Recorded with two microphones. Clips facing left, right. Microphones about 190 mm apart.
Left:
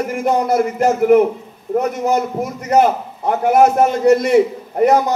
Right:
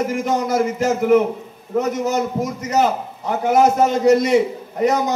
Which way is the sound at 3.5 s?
55° left (ahead or behind).